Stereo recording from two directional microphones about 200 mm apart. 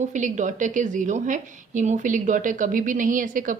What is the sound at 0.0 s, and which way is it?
A woman's voice, 40° right (ahead or behind).